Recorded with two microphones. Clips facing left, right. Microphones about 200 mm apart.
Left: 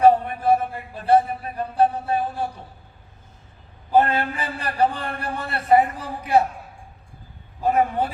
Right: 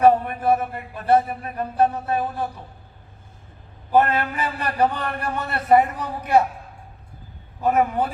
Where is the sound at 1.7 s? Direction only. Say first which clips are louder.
Left 1 dB; 30° left (ahead or behind).